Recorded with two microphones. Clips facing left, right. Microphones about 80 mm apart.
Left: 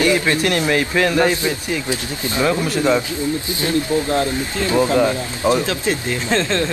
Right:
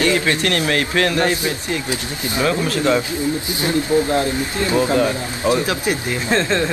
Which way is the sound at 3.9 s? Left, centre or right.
Right.